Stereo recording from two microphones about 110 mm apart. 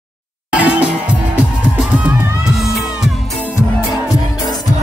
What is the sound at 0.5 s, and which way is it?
Music, 10° right (ahead or behind).